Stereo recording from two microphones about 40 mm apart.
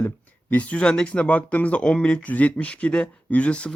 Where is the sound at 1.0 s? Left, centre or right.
Left.